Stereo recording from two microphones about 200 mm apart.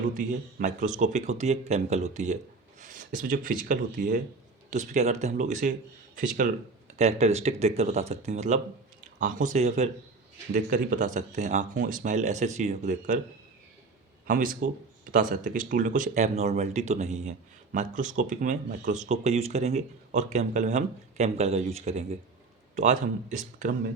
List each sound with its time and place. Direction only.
0.2 s speech: 40° right (ahead or behind)
14.3 s a man's voice: 40° right (ahead or behind)